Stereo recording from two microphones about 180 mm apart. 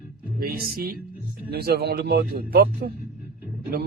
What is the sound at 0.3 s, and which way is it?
Speech, 55° right (ahead or behind).